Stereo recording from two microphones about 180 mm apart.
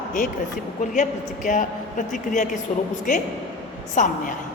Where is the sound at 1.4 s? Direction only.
45° left (ahead or behind).